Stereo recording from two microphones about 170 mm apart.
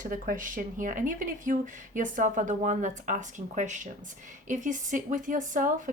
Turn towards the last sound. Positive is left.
turn(degrees=-50)  # may be behind; listen again after turning